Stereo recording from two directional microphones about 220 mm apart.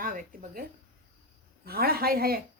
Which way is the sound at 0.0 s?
40° right (ahead or behind).